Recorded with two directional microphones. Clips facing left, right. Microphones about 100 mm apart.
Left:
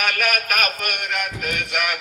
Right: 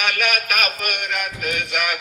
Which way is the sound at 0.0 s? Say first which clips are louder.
Even; 40° left (ahead or behind).